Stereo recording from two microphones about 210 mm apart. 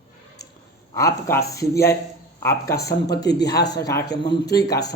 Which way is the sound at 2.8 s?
50° left (ahead or behind).